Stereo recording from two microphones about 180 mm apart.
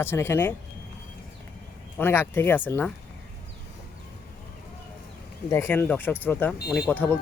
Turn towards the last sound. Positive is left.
turn(degrees=10)  # may be behind; listen again after turning